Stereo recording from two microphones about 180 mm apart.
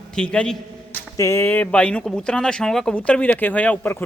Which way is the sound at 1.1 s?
15° left (ahead or behind).